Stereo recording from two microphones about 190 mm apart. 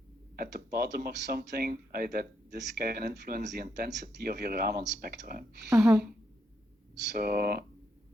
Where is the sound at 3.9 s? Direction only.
55° right (ahead or behind).